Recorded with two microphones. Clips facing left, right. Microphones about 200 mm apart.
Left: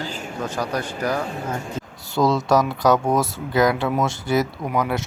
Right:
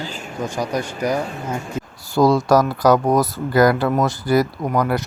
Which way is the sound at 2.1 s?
25° left (ahead or behind).